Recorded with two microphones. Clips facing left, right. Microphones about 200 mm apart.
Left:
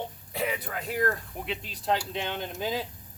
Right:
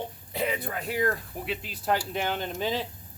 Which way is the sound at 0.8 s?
Centre (ahead or behind).